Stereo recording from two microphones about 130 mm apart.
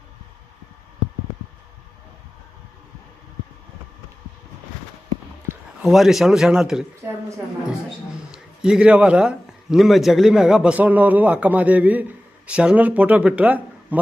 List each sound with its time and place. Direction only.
5.8 s a man's voice: centre (ahead or behind)
7.0 s speech: 15° right (ahead or behind)
8.3 s speech: 5° right (ahead or behind)